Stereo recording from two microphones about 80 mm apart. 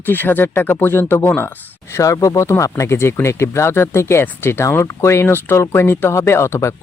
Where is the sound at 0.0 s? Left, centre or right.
Left.